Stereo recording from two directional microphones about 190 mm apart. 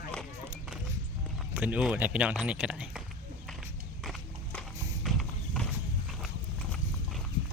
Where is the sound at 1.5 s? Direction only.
5° right (ahead or behind).